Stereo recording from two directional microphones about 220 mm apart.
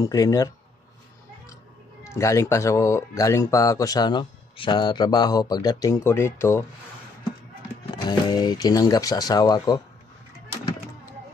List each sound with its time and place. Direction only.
0.0 s speech: 15° left (ahead or behind)
2.0 s speech: 15° left (ahead or behind)
8.1 s speech: 20° left (ahead or behind)